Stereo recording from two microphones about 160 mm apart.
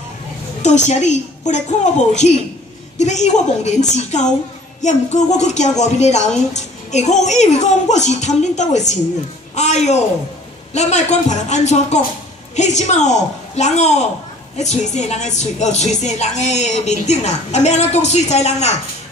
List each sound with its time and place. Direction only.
0.6 s a woman's voice: 45° left (ahead or behind)